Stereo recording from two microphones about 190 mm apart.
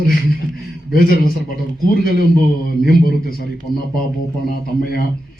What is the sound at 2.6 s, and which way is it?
A man's voice, 50° left (ahead or behind).